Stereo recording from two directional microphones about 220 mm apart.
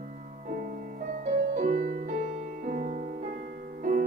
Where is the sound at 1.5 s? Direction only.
40° right (ahead or behind).